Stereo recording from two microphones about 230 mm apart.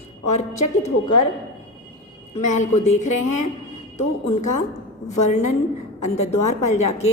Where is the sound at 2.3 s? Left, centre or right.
Left.